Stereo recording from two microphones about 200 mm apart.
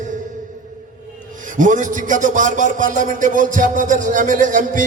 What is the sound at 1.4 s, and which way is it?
Speech, 40° right (ahead or behind).